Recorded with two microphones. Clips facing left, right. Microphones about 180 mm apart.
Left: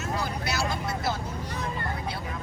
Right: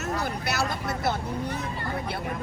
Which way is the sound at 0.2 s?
60° right (ahead or behind).